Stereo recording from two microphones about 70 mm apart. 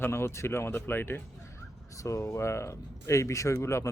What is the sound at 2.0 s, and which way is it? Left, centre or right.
Speech, left.